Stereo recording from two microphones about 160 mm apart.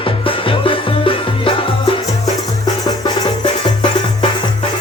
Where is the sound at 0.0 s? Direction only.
35° left (ahead or behind).